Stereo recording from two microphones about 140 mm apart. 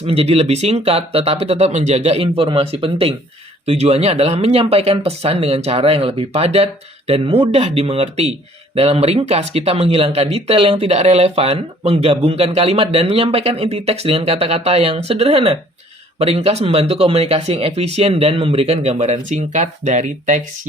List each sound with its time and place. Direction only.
0.0 s speech: 45° right (ahead or behind); by 20.4 s 60° right (ahead or behind)